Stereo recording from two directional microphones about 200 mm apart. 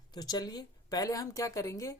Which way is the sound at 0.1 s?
20° left (ahead or behind).